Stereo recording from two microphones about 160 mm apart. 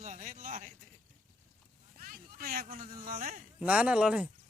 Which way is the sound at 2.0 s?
65° right (ahead or behind).